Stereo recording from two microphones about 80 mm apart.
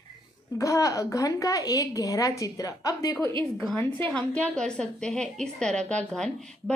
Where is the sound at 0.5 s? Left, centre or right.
Left.